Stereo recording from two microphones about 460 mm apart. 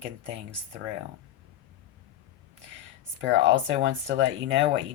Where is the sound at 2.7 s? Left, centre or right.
Right.